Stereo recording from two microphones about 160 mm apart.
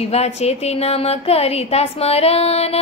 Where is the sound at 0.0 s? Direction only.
40° left (ahead or behind).